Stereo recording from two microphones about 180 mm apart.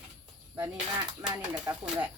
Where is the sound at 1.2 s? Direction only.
25° right (ahead or behind).